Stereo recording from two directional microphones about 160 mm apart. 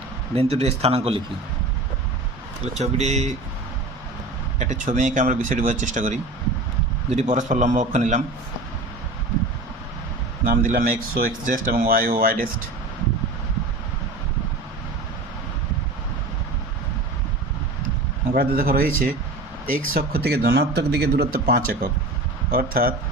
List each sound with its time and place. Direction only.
0.3 s speech: 40° right (ahead or behind)
2.7 s speech: 45° right (ahead or behind)
4.6 s speech: 50° right (ahead or behind)
10.4 s speech: 60° right (ahead or behind)
18.3 s speech: 65° right (ahead or behind)